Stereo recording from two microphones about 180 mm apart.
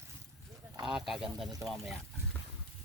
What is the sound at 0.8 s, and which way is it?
Duck, centre (ahead or behind).